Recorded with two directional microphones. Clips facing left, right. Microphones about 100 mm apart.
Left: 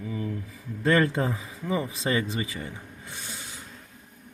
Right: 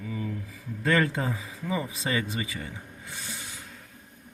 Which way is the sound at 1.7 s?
30° left (ahead or behind).